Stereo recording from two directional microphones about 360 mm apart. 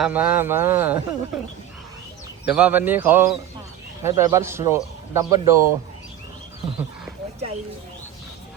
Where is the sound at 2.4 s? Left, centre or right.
Centre.